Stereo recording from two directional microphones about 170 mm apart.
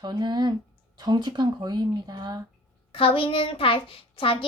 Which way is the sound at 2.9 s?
30° left (ahead or behind).